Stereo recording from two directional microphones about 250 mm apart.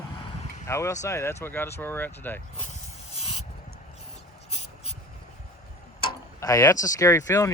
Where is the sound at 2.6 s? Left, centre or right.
Left.